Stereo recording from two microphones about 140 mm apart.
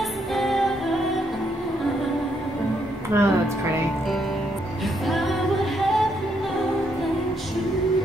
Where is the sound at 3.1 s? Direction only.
20° right (ahead or behind).